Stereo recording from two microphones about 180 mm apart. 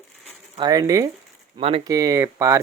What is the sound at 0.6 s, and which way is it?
Speech, 20° right (ahead or behind).